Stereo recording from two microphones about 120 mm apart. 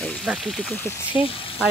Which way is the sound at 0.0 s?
5° left (ahead or behind).